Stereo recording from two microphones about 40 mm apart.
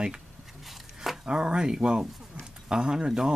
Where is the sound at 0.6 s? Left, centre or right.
Centre.